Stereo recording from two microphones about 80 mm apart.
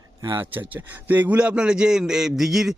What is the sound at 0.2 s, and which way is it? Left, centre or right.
Speech, right.